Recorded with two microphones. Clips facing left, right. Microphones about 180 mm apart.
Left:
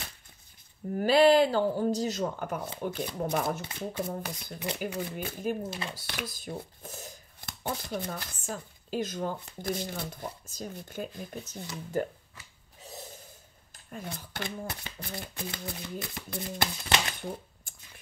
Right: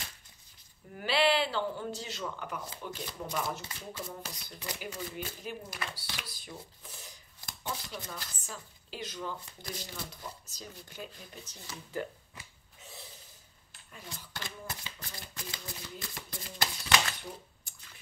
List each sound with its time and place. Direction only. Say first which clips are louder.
0.9 s speech: left 8 dB; 45° left (ahead or behind)
5.6 s speech: left 6 dB; 25° left (ahead or behind)
5.9 s speech: left 7 dB; 50° left (ahead or behind)
12.8 s snort: left 6 dB; 45° left (ahead or behind)
13.8 s speech: left 8 dB; 55° left (ahead or behind)
17.7 s a sound: left 3 dB; 50° left (ahead or behind)